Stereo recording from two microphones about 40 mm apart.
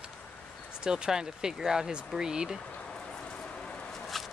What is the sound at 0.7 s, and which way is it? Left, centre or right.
Speech, centre.